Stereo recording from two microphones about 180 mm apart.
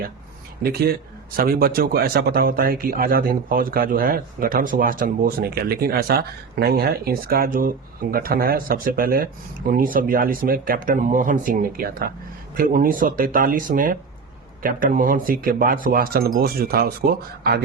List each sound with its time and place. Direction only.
0.6 s speech: 60° right (ahead or behind)